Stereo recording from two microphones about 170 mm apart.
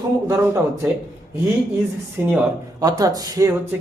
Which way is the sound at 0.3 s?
15° right (ahead or behind).